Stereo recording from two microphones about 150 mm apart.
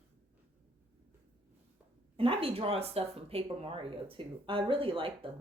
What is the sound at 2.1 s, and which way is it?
A woman's voice, 40° right (ahead or behind).